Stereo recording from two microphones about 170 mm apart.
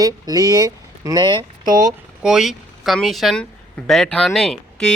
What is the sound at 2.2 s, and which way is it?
Speech, 5° right (ahead or behind).